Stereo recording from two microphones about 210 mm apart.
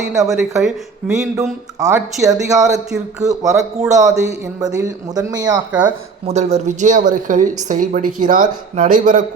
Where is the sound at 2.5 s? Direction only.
15° right (ahead or behind).